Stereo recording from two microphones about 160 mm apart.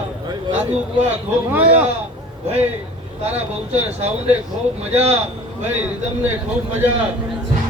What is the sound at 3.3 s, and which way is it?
Speech, 45° right (ahead or behind).